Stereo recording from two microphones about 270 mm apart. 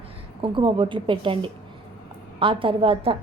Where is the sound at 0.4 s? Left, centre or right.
Centre.